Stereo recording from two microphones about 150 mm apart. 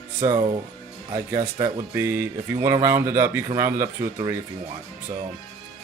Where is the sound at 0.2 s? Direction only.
30° right (ahead or behind).